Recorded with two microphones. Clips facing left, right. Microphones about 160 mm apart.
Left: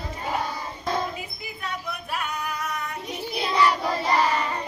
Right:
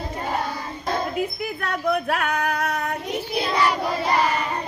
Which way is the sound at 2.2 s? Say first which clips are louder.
Right 7 dB; 90° right.